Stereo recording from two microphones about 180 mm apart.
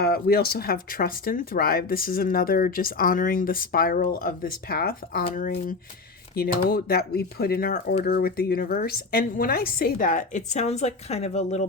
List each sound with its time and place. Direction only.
0.0 s a woman's voice: 55° left (ahead or behind)
6.3 s a woman's voice: 60° left (ahead or behind); by 11.6 s 35° left (ahead or behind)